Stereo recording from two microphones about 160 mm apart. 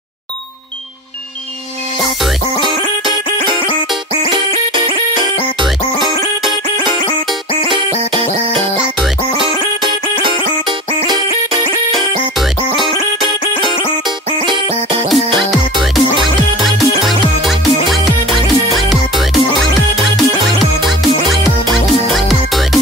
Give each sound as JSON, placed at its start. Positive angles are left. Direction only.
{"t": 2.6, "sound": "music", "side_deg": -30}
{"t": 7.6, "sound": "music", "side_deg": -30}
{"t": 12.4, "sound": "music", "side_deg": 0}
{"t": 15.8, "sound": "music", "side_deg": 0}
{"t": 22.1, "sound": "music", "side_deg": 0}